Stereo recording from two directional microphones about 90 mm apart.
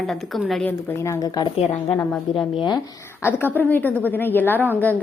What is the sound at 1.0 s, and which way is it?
Speech, 30° left (ahead or behind).